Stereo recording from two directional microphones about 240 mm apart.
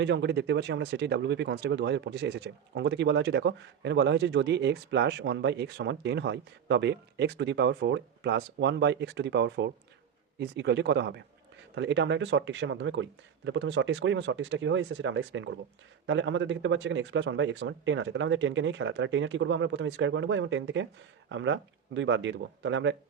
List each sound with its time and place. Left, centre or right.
0.0 s speech: right